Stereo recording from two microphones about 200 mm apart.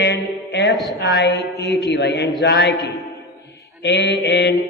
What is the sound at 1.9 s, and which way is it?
Speech, 60° left (ahead or behind).